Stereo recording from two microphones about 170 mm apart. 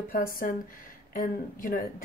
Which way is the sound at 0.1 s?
55° left (ahead or behind).